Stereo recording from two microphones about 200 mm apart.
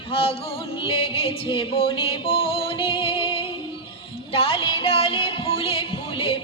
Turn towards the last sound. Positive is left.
turn(degrees=25)  # may be behind; listen again after turning